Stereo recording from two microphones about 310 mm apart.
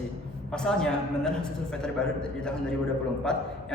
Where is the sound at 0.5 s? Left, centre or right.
Centre.